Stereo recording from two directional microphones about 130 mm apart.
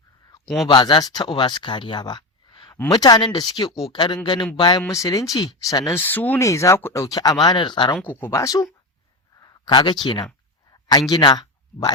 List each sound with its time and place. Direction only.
0.4 s speech: centre (ahead or behind)
0.7 s speech: 35° left (ahead or behind)
4.9 s speech: 25° left (ahead or behind)
6.1 s speech: 15° left (ahead or behind); by 7.9 s 35° left (ahead or behind)
8.1 s speech: 20° left (ahead or behind); by 10.2 s 35° left (ahead or behind)
10.7 s a sound: 30° left (ahead or behind)
11.1 s speech: 35° left (ahead or behind)